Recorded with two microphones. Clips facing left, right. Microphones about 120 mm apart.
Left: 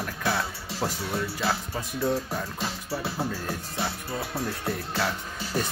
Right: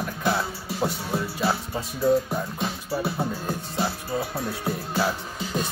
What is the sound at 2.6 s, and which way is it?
Music, 25° right (ahead or behind).